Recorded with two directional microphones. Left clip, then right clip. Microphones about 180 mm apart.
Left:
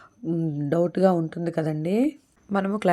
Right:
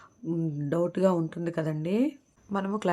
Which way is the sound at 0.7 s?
10° left (ahead or behind).